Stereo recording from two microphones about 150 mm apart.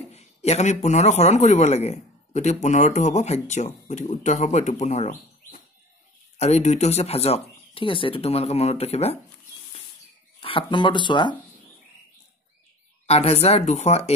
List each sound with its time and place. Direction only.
0.1 s speech: 45° left (ahead or behind)
10.4 s speech: 35° left (ahead or behind)
13.0 s speech: 45° left (ahead or behind)